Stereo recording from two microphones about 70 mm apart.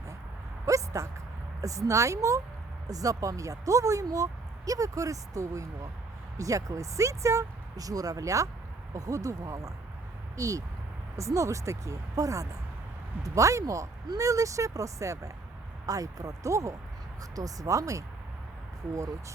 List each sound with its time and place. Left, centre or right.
0.6 s dog: right
1.6 s speech: right